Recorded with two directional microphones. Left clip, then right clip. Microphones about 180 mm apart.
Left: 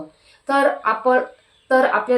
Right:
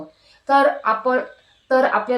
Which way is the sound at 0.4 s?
15° left (ahead or behind).